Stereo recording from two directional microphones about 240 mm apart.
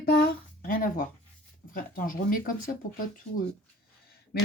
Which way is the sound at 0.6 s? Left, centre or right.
Left.